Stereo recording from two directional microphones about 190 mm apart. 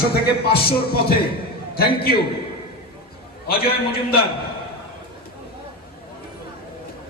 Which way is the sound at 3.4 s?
55° left (ahead or behind).